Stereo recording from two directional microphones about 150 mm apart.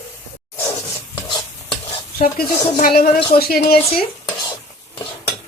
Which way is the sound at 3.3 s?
90° left.